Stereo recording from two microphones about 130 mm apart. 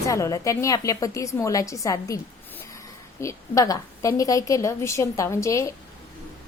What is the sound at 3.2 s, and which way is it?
A woman's voice, 25° left (ahead or behind).